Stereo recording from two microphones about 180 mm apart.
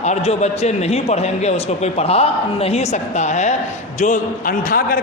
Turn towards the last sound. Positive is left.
turn(degrees=50)  # may be behind; listen again after turning